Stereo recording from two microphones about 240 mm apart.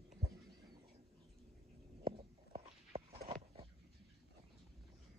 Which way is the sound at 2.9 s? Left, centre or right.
Right.